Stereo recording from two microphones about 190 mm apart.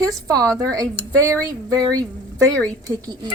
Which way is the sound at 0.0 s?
20° right (ahead or behind).